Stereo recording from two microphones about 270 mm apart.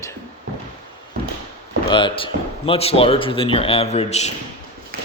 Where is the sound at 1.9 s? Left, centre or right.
Centre.